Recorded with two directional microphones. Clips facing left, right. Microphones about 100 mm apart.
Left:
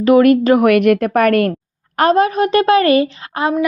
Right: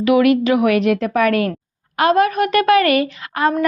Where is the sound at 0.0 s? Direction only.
40° left (ahead or behind).